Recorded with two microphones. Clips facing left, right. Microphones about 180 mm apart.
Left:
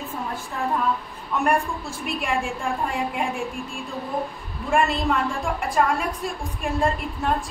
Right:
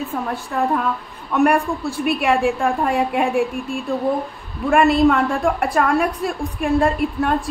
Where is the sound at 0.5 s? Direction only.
65° right (ahead or behind).